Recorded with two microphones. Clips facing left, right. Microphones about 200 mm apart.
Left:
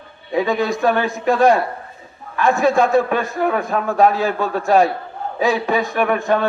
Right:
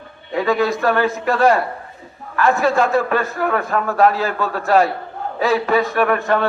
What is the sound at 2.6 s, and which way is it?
A man's voice, 15° left (ahead or behind).